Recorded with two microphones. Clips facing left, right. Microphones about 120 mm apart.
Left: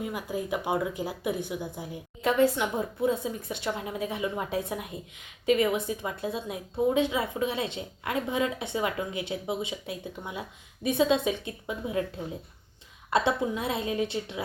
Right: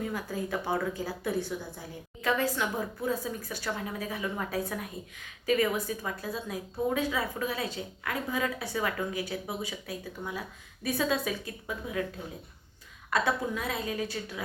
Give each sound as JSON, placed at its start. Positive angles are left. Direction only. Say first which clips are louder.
{"t": 0.0, "sound": "a woman's voice", "louder": "left 1 dB", "side_deg": 15}
{"t": 13.1, "sound": "a woman's voice", "louder": "left 3 dB", "side_deg": 25}